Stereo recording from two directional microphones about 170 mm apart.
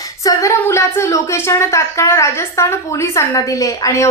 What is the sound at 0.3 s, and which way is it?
A woman's voice, 20° left (ahead or behind).